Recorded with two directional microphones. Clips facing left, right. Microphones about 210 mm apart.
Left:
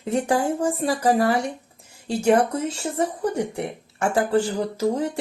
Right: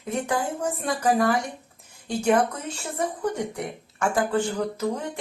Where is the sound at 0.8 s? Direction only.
30° left (ahead or behind).